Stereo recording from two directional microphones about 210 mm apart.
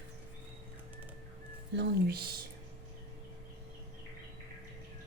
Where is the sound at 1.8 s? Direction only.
50° right (ahead or behind).